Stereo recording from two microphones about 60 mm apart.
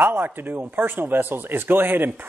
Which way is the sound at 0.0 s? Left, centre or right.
Right.